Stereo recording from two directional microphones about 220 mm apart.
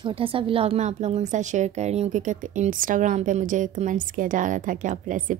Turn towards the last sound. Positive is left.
turn(degrees=-35)  # may be behind; listen again after turning